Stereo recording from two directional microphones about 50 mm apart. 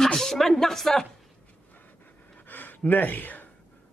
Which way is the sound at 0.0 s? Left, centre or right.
Centre.